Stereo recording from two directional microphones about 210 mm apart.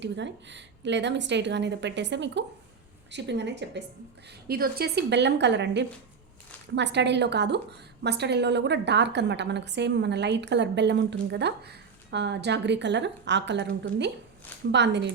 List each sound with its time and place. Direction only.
0.0 s a woman's voice: 55° right (ahead or behind)